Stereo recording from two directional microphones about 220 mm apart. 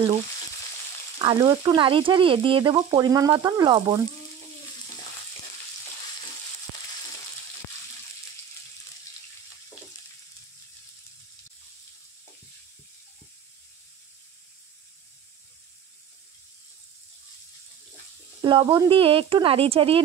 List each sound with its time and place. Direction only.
1.2 s frying: 20° right (ahead or behind)
18.4 s frying: 20° right (ahead or behind)